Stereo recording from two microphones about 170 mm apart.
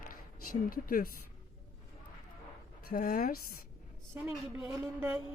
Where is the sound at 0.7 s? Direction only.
55° left (ahead or behind).